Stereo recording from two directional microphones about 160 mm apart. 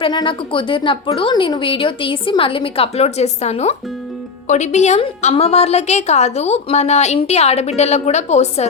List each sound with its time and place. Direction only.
0.0 s a woman's voice: 30° left (ahead or behind)